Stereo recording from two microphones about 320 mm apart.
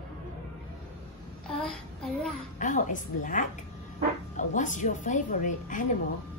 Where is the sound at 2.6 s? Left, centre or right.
Left.